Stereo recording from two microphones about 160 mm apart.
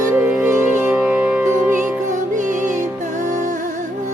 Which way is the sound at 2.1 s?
50° right (ahead or behind).